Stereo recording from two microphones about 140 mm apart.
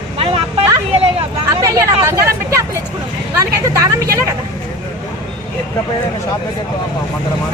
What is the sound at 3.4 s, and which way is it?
Vehicle, 25° right (ahead or behind).